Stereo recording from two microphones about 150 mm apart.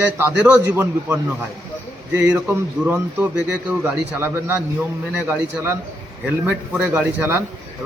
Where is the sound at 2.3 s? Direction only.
15° right (ahead or behind).